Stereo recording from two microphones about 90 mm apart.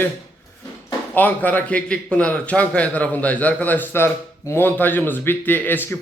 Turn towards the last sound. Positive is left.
turn(degrees=20)  # may be behind; listen again after turning